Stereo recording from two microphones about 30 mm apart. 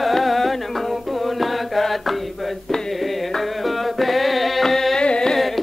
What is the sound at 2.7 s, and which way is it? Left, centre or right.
Music, centre.